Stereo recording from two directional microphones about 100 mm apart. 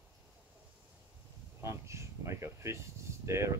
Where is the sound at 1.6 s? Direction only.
30° right (ahead or behind).